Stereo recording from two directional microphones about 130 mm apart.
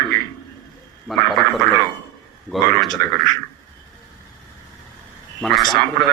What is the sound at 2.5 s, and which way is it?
Speech, 15° left (ahead or behind).